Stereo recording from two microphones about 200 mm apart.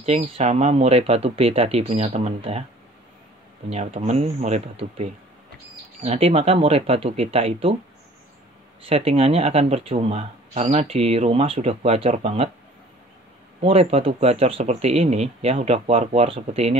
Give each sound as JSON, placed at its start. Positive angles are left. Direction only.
{"t": 0.0, "sound": "speech", "side_deg": -30}
{"t": 3.7, "sound": "speech", "side_deg": -35}
{"t": 6.0, "sound": "speech", "side_deg": -30}
{"t": 8.8, "sound": "speech", "side_deg": -30}
{"t": 13.6, "sound": "speech", "side_deg": -30}